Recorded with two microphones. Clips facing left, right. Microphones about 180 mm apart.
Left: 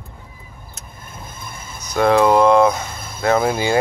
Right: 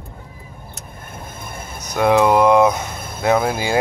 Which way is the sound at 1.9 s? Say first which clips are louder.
Even; 10° right (ahead or behind).